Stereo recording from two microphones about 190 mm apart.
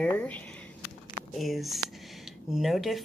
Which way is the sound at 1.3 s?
Centre (ahead or behind).